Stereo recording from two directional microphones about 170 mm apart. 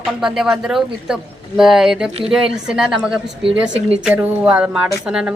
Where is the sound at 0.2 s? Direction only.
5° right (ahead or behind).